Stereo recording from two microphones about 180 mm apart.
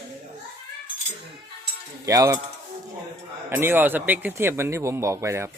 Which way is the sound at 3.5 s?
10° right (ahead or behind).